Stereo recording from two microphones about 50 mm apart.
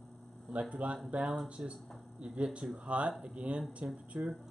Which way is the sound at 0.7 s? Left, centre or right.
Right.